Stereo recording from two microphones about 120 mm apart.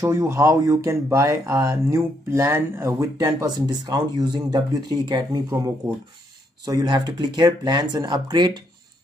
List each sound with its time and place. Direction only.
0.0 s speech: 25° right (ahead or behind)
6.6 s speech: 30° right (ahead or behind)